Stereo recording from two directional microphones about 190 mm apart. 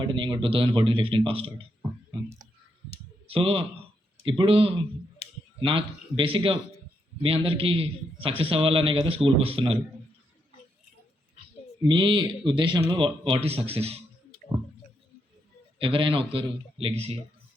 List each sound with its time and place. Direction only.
0.0 s a man's voice: 25° right (ahead or behind)
3.2 s a man's voice: 30° right (ahead or behind)
5.2 s clicking: 30° left (ahead or behind)
5.5 s a man's voice: 30° right (ahead or behind)
11.8 s a man's voice: 25° right (ahead or behind)
15.8 s a man's voice: 25° right (ahead or behind)